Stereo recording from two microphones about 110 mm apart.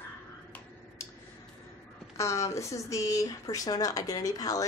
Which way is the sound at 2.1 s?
25° left (ahead or behind).